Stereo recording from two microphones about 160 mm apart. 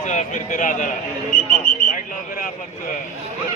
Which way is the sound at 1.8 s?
60° left (ahead or behind).